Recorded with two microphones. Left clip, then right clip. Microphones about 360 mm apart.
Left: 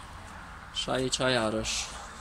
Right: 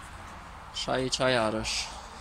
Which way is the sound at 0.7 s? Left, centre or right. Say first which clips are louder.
Even; centre.